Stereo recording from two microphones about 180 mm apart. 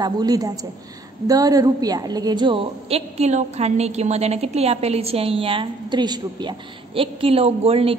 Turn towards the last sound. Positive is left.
turn(degrees=-35)  # may be behind; listen again after turning